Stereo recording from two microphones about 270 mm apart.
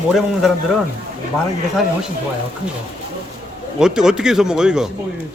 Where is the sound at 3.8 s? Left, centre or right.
Centre.